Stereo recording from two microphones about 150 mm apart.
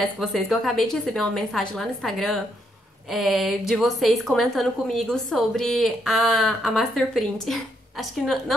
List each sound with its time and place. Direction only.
0.2 s a woman's voice: centre (ahead or behind)